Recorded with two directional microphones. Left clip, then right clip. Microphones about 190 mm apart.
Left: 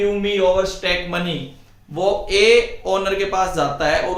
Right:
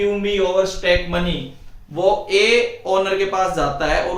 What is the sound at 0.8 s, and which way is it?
Speech, 30° left (ahead or behind).